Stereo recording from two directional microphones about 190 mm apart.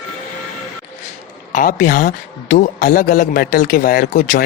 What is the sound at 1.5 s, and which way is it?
Speech, 45° left (ahead or behind).